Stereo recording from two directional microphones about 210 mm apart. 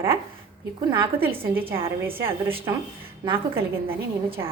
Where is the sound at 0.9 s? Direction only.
10° right (ahead or behind).